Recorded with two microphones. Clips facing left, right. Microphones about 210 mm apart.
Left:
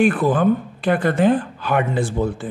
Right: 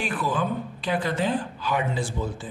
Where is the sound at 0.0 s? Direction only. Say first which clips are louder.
Left 11 dB; 55° left (ahead or behind).